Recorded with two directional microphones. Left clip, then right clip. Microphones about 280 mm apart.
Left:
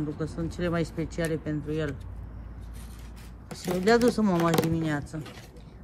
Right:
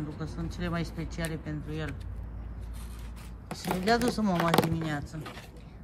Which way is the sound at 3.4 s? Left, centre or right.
Right.